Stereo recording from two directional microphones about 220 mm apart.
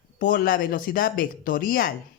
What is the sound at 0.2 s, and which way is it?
Speech, 40° left (ahead or behind).